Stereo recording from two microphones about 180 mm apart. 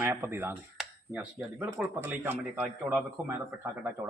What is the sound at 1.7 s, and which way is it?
A man's voice, 10° right (ahead or behind).